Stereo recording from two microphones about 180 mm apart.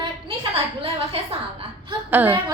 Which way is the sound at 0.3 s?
30° right (ahead or behind).